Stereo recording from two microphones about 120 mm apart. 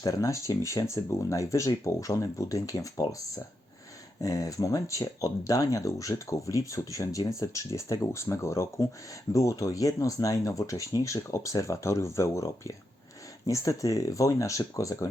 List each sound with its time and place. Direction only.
0.0 s speech: 30° left (ahead or behind)